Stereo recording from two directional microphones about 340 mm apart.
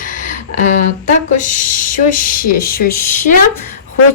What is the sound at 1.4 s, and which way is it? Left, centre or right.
Speech, left.